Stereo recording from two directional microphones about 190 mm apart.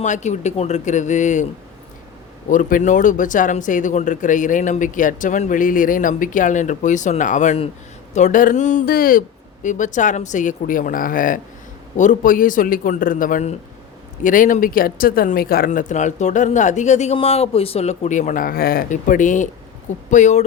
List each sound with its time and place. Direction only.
0.0 s speech: 40° left (ahead or behind)
2.5 s speech: 45° left (ahead or behind)